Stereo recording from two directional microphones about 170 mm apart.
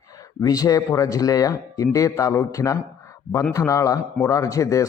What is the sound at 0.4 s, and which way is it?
Speech, 20° left (ahead or behind).